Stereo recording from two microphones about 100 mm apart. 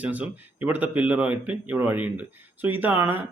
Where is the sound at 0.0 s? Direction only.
15° right (ahead or behind).